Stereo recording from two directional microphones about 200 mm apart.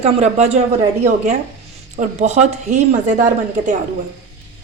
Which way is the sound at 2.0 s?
35° right (ahead or behind).